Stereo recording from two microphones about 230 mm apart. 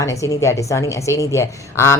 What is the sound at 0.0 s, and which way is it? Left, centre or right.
Speech, centre.